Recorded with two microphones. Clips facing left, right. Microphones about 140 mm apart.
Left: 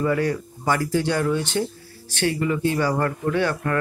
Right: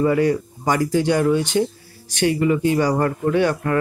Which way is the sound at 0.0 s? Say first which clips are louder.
Right 5 dB; 15° right (ahead or behind).